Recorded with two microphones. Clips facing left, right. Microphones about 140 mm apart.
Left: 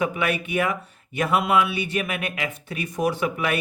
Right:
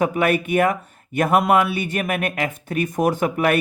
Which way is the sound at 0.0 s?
45° right (ahead or behind).